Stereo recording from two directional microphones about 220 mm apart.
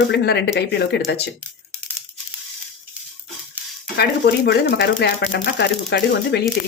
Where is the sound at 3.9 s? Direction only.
45° left (ahead or behind).